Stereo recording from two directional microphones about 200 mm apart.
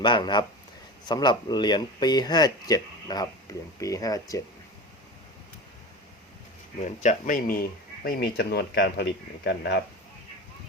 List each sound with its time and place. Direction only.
0.0 s speech: 25° left (ahead or behind)
6.8 s speech: 35° left (ahead or behind); by 9.7 s 55° left (ahead or behind)